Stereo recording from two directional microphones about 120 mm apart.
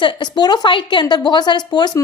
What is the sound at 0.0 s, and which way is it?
A woman's voice, 40° left (ahead or behind).